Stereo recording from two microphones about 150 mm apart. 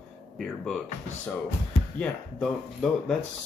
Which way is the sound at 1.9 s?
5° left (ahead or behind).